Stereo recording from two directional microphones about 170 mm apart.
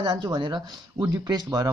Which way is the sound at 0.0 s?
25° right (ahead or behind).